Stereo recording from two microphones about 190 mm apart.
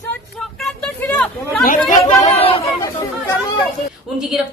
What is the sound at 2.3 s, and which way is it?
Chatter, 30° left (ahead or behind).